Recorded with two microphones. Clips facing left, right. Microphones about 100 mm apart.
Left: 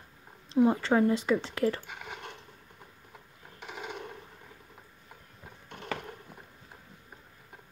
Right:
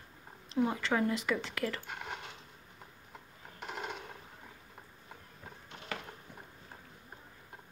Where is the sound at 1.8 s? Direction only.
Centre (ahead or behind).